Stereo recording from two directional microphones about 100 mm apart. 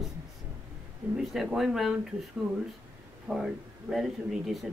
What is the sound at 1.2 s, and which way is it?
Speech, 5° right (ahead or behind).